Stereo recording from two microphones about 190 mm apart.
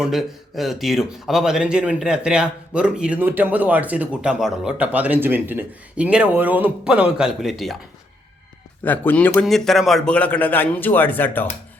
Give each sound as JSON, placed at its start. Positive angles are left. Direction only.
{"t": 0.0, "sound": "a man's voice", "side_deg": 0}
{"t": 8.8, "sound": "a man's voice", "side_deg": 10}